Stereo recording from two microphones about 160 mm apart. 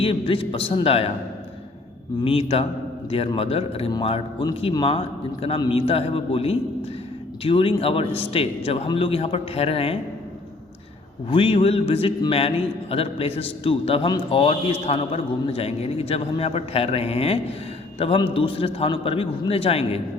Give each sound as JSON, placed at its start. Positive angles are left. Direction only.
{"t": 0.0, "sound": "speech", "side_deg": 35}
{"t": 2.2, "sound": "speech", "side_deg": 35}
{"t": 11.3, "sound": "speech", "side_deg": 35}